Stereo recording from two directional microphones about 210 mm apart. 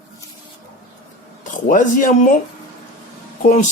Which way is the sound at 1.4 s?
40° left (ahead or behind).